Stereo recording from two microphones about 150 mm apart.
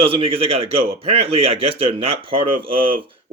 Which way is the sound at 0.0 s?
40° right (ahead or behind).